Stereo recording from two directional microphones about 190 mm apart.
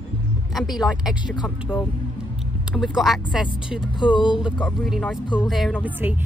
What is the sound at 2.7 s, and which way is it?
Speech, centre (ahead or behind).